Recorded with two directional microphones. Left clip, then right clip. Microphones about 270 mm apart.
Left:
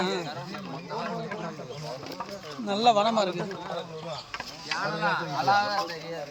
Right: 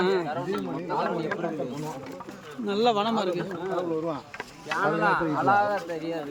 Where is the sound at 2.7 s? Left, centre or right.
Centre.